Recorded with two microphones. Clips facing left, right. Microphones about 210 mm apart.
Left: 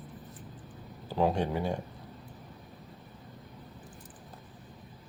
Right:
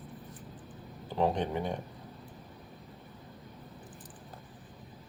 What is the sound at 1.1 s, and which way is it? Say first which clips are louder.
Speech: left 1 dB; 5° left (ahead or behind).